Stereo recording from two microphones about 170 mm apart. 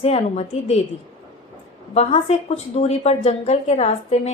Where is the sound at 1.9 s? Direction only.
40° left (ahead or behind).